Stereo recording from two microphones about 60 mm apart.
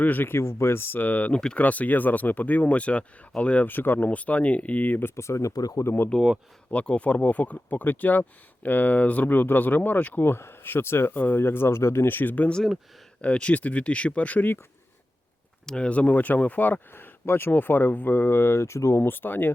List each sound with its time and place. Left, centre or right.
0.0 s speech: left
0.3 s speech: left
3.7 s speech: left
5.1 s speech: left
6.1 s speech: centre
10.2 s speech: left
13.2 s speech: centre
15.6 s speech: centre; by 18.9 s left
18.9 s speech: left